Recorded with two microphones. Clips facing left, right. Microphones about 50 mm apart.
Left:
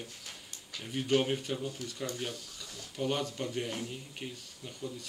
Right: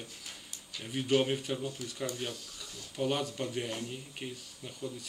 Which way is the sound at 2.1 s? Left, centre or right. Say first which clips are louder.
Even; centre.